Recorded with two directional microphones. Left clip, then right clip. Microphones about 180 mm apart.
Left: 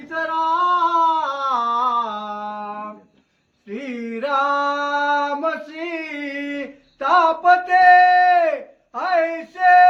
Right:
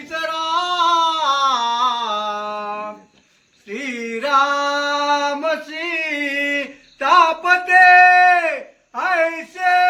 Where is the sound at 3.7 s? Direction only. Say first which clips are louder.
Right 4 dB; 60° left (ahead or behind).